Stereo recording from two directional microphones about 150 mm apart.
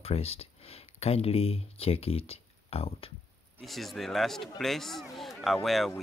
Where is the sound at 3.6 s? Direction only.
Centre (ahead or behind).